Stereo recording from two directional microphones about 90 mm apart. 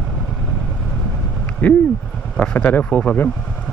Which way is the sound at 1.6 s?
15° left (ahead or behind).